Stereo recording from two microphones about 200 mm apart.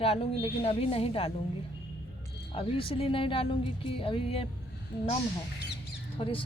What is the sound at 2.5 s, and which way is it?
Speech, 25° left (ahead or behind).